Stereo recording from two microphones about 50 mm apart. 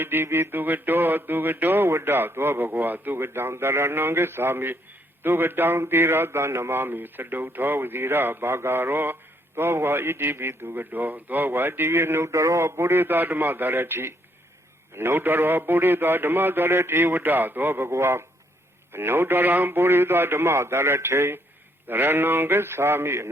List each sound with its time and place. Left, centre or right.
0.0 s a man's voice: right